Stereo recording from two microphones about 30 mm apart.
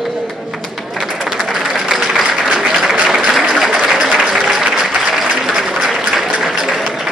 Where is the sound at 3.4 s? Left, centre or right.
Centre.